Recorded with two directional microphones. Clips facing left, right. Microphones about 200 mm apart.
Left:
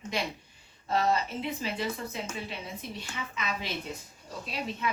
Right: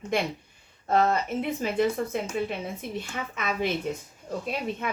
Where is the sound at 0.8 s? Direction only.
50° right (ahead or behind).